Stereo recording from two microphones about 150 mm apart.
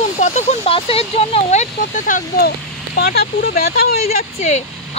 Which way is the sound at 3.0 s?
90° left.